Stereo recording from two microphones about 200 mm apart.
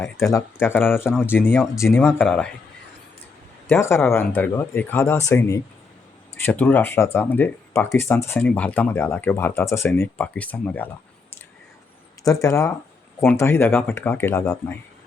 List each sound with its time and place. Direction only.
0.0 s speech: 15° left (ahead or behind)
3.7 s speech: 15° left (ahead or behind)
12.2 s speech: 15° left (ahead or behind)